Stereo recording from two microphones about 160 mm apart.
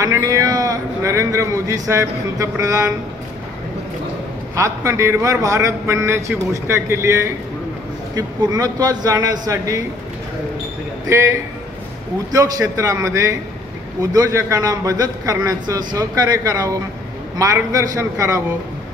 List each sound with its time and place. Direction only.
0.0 s a man's voice: 20° right (ahead or behind)
4.6 s a man's voice: 20° right (ahead or behind)
8.4 s a man's voice: 25° right (ahead or behind)
12.3 s a man's voice: 20° right (ahead or behind)